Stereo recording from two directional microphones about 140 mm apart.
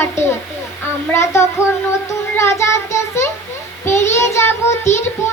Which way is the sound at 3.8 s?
20° left (ahead or behind).